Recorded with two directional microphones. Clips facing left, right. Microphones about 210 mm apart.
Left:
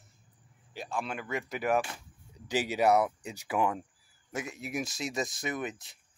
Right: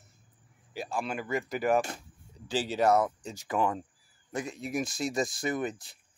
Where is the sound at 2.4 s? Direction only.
15° left (ahead or behind).